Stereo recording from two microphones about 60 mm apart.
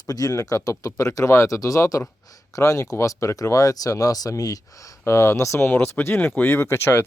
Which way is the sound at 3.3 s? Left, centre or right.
Left.